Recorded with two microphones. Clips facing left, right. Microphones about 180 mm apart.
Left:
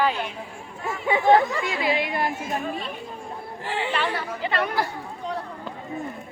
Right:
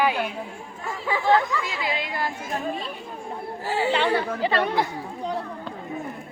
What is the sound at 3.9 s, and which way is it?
Speech, 25° right (ahead or behind).